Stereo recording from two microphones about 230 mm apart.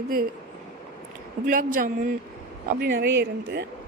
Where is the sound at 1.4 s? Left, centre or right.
Right.